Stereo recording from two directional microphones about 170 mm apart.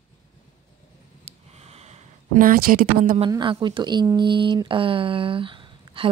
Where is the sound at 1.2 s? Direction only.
40° right (ahead or behind).